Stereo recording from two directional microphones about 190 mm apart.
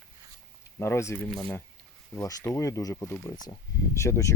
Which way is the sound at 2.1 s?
15° left (ahead or behind).